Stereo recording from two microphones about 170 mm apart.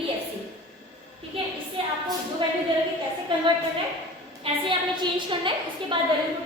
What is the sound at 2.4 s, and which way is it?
A woman's voice, 30° right (ahead or behind).